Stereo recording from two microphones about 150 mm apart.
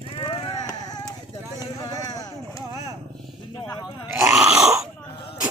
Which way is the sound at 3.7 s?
25° left (ahead or behind).